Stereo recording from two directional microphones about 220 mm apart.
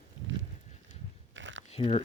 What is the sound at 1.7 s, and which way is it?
Speech, 25° left (ahead or behind).